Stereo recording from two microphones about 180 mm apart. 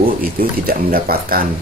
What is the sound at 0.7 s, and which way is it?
Speech, 55° right (ahead or behind).